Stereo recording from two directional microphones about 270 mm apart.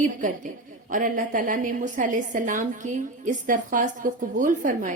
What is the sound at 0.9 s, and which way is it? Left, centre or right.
A woman's voice, right.